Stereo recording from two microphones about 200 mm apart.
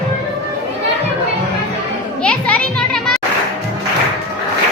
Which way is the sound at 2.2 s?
5° left (ahead or behind).